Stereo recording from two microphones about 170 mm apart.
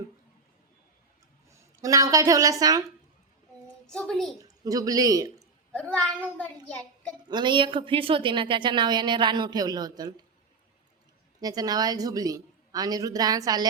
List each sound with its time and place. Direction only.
1.5 s a woman's voice: 20° right (ahead or behind)
3.8 s a child's voice: 5° left (ahead or behind)
4.3 s a woman's voice: 20° right (ahead or behind)
6.0 s a child's voice: 5° left (ahead or behind)
7.3 s a woman's voice: 25° right (ahead or behind)
11.3 s a woman's voice: 20° right (ahead or behind)